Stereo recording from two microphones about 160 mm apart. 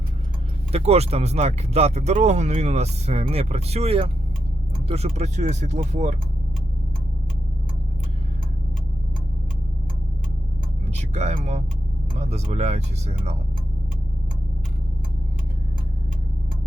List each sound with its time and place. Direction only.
0.7 s speech: 40° right (ahead or behind)
10.9 s speech: 45° right (ahead or behind)